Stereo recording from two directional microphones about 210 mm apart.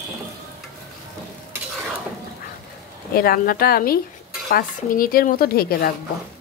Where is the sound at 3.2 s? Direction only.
45° left (ahead or behind).